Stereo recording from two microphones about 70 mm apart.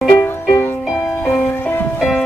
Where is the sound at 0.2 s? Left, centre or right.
Left.